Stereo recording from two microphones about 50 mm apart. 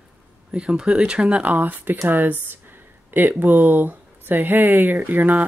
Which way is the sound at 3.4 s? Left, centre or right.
Right.